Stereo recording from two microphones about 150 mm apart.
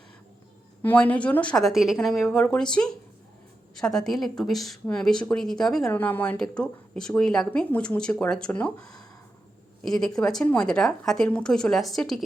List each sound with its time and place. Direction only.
0.8 s speech: 10° left (ahead or behind)